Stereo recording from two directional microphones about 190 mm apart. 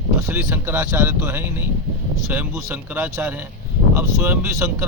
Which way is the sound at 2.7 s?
15° right (ahead or behind).